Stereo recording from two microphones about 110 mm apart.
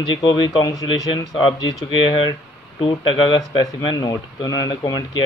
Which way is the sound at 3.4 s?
30° left (ahead or behind).